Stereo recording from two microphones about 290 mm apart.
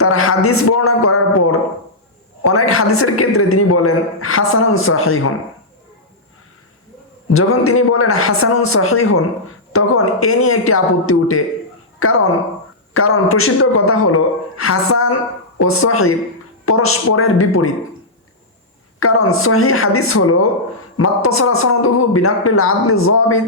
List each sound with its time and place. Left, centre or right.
0.0 s a woman's voice: left
7.3 s a woman's voice: left
18.9 s a woman's voice: left